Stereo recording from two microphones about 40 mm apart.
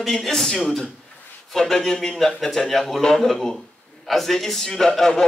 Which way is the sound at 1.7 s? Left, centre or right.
Centre.